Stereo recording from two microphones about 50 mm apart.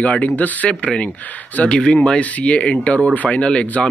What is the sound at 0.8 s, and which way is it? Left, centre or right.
Speech, left.